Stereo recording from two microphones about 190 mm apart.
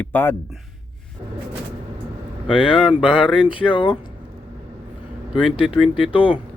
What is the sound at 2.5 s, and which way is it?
Speech, 25° left (ahead or behind).